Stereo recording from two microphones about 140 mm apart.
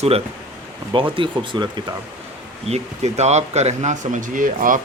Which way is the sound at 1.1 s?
35° right (ahead or behind).